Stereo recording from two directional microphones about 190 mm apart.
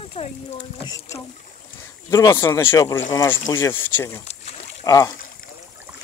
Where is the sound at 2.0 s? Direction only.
20° left (ahead or behind).